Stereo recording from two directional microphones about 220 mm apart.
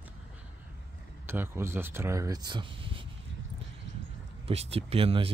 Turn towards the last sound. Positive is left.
turn(degrees=-25)  # may be behind; listen again after turning